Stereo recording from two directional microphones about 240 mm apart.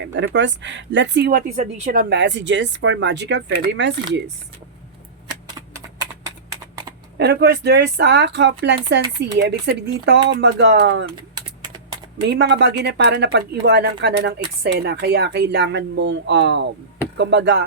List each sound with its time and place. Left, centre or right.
0.3 s speech: right
7.2 s speech: right
12.3 s speech: right